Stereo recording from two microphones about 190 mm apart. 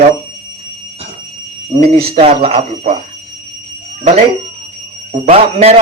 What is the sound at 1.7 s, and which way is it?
Speech, 30° right (ahead or behind).